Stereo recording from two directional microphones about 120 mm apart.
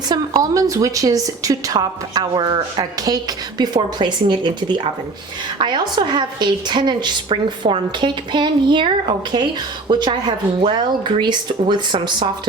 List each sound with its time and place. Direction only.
0.1 s a woman's voice: 30° right (ahead or behind)